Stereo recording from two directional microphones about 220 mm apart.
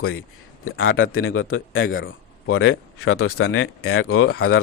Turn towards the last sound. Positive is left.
turn(degrees=75)  # may be behind; listen again after turning